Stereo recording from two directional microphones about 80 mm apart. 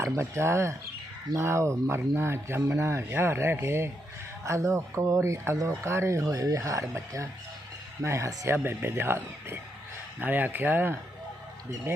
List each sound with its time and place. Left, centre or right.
0.0 s speech: right
10.2 s speech: right
11.9 s speech: right